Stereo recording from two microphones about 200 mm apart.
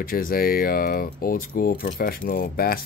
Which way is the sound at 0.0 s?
45° left (ahead or behind).